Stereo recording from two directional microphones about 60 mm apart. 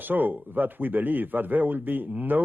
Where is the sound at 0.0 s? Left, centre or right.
Right.